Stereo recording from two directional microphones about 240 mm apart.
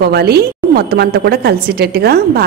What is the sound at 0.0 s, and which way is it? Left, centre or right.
A woman's voice, right.